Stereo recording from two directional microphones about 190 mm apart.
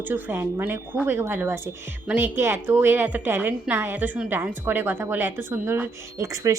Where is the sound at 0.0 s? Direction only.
10° right (ahead or behind).